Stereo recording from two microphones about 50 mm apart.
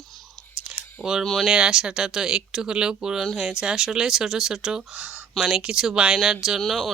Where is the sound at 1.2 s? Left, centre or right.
Centre.